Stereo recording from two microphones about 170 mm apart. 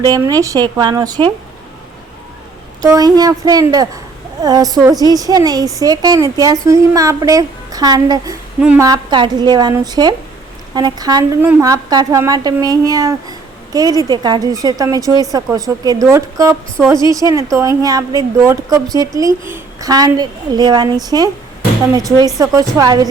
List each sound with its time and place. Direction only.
0.0 s a woman's voice: 20° right (ahead or behind)
2.8 s a woman's voice: 20° right (ahead or behind)